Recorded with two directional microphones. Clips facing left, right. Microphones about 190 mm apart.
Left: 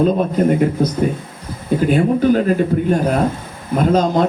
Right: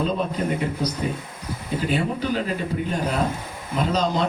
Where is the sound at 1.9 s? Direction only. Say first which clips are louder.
Left 10 dB; 50° left (ahead or behind).